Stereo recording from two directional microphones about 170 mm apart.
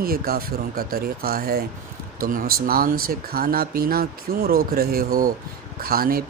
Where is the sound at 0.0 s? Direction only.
60° right (ahead or behind).